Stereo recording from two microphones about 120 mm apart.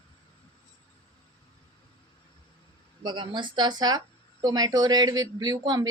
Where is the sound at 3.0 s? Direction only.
40° right (ahead or behind).